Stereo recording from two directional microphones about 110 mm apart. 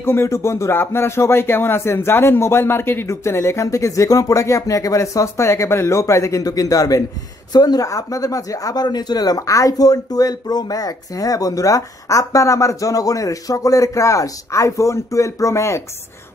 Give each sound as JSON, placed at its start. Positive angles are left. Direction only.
{"t": 0.0, "sound": "speech", "side_deg": 25}